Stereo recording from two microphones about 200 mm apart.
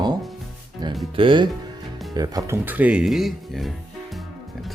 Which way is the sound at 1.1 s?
25° right (ahead or behind).